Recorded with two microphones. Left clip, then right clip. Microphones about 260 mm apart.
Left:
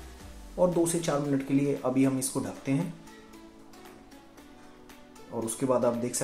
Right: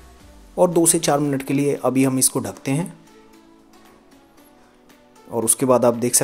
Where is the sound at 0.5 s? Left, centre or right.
Right.